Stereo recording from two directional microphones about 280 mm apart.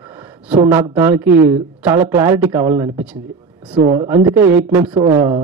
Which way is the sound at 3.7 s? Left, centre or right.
Right.